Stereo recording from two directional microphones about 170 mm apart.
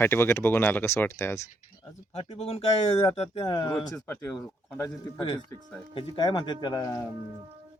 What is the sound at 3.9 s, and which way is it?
Speech, 10° left (ahead or behind).